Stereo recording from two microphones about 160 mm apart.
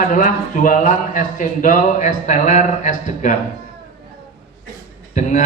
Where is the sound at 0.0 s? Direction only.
55° left (ahead or behind).